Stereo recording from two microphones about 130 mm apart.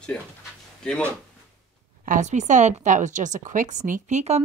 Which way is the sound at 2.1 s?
65° right (ahead or behind).